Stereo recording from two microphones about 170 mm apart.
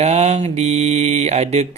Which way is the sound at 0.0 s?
40° right (ahead or behind).